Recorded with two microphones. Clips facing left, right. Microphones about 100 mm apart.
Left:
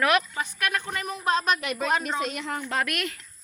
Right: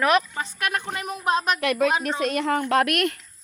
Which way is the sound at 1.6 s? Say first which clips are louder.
Right 5 dB; 60° right (ahead or behind).